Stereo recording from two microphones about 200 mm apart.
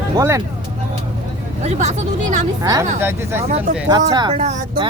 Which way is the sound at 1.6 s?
35° right (ahead or behind).